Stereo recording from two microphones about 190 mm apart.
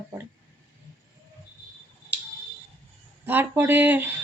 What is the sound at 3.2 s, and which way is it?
Speech, 10° right (ahead or behind).